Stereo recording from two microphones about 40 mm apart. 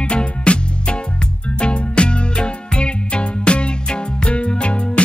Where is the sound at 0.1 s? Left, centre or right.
Left.